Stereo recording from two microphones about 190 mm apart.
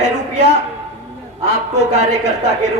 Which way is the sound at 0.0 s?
60° left (ahead or behind).